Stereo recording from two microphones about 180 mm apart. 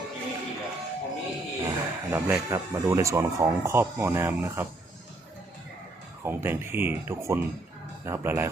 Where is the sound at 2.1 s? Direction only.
15° right (ahead or behind).